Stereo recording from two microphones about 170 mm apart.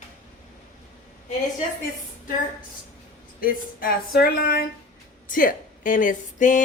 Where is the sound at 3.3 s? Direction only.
55° left (ahead or behind).